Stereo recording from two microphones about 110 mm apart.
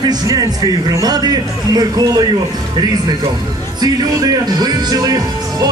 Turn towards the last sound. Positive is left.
turn(degrees=-35)  # may be behind; listen again after turning